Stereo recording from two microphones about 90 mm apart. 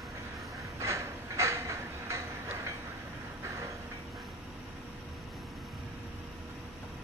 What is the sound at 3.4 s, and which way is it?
Vehicle, 30° right (ahead or behind).